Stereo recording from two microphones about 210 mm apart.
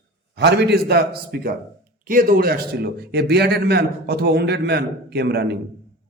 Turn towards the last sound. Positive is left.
turn(degrees=-50)  # may be behind; listen again after turning